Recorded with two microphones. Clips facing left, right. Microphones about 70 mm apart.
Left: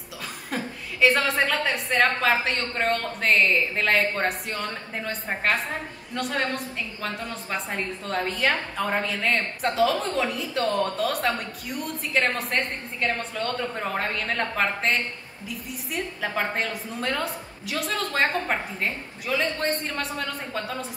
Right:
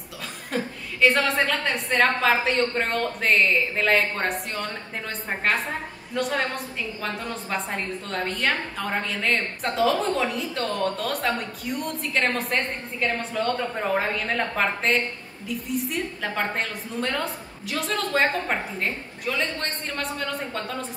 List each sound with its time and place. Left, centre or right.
0.5 s a woman's voice: centre